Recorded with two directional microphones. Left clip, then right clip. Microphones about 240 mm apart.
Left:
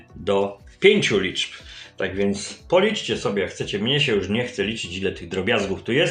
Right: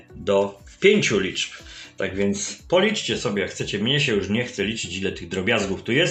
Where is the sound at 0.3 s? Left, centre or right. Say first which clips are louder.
Right 1 dB; centre.